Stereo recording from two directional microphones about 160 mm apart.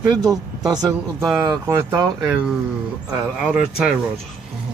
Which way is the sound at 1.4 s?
25° right (ahead or behind).